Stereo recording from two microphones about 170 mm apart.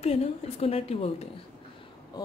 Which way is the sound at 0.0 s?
35° left (ahead or behind).